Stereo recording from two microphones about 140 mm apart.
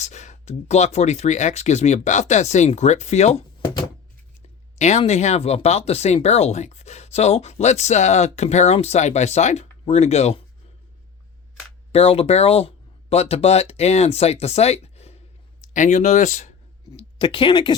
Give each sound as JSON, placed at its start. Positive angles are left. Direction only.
{"t": 0.0, "sound": "speech", "side_deg": 55}
{"t": 4.8, "sound": "speech", "side_deg": 50}
{"t": 11.9, "sound": "speech", "side_deg": 45}
{"t": 15.7, "sound": "speech", "side_deg": 60}
{"t": 16.9, "sound": "speech", "side_deg": 35}